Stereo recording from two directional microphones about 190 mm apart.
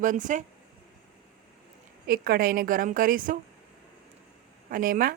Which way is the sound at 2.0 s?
50° right (ahead or behind).